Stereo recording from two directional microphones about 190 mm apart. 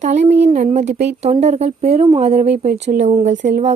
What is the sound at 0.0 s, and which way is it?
A woman's voice, 40° right (ahead or behind).